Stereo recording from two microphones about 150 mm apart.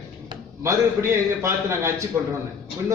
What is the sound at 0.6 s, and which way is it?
A man's voice, 20° right (ahead or behind).